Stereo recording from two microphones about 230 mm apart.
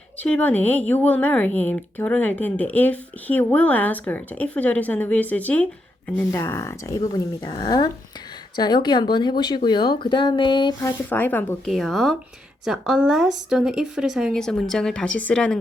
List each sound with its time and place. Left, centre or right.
0.2 s speech: centre